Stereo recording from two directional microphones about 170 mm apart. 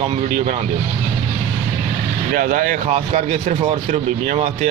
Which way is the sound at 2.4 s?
55° right (ahead or behind).